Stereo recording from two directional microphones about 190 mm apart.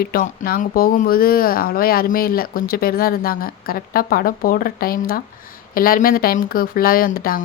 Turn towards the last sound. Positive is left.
turn(degrees=50)  # may be behind; listen again after turning